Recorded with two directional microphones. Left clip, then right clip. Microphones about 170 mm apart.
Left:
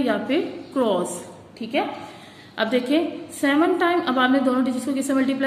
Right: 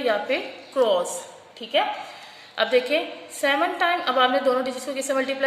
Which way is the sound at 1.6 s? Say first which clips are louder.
Right 2 dB; 40° right (ahead or behind).